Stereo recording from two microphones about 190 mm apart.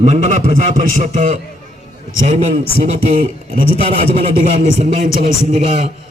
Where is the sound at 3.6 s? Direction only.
30° right (ahead or behind).